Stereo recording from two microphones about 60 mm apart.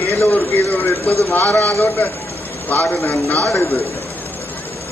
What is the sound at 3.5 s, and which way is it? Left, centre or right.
Speech, left.